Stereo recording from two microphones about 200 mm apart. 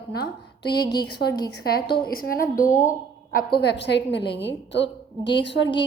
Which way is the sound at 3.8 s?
60° left (ahead or behind).